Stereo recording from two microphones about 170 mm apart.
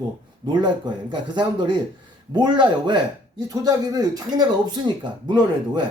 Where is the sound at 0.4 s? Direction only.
25° right (ahead or behind).